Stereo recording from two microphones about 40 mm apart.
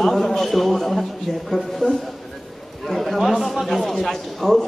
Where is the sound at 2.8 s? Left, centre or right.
Centre.